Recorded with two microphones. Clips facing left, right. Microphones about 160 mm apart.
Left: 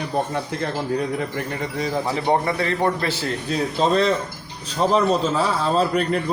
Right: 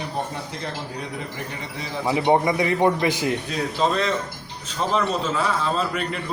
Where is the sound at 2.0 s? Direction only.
15° right (ahead or behind).